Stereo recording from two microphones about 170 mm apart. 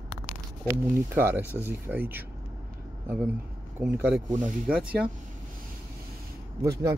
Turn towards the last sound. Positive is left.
turn(degrees=-15)  # may be behind; listen again after turning